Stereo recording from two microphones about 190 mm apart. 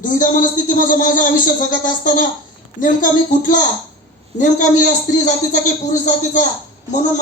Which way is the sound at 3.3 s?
40° left (ahead or behind).